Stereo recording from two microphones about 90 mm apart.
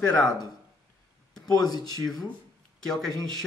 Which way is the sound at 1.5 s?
45° left (ahead or behind).